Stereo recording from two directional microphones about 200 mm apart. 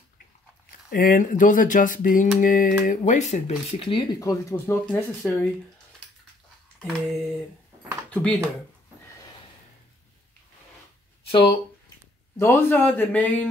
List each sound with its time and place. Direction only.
0.7 s speech: 45° left (ahead or behind); by 4.7 s 15° left (ahead or behind)
4.8 s speech: 5° left (ahead or behind)
6.8 s speech: centre (ahead or behind)
12.4 s a man's voice: 10° left (ahead or behind)